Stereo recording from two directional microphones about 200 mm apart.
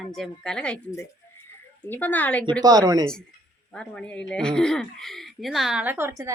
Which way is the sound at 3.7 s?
5° left (ahead or behind).